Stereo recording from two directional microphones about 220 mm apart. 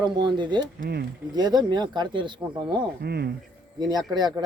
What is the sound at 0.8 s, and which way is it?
Speech, 45° right (ahead or behind).